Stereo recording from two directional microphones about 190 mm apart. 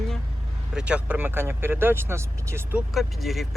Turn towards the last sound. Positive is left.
turn(degrees=0)  # may be behind; listen again after turning